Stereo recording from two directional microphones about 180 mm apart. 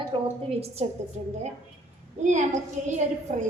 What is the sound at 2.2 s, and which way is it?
A woman's voice, 40° right (ahead or behind).